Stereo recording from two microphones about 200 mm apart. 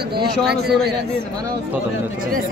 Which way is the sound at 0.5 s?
55° right (ahead or behind).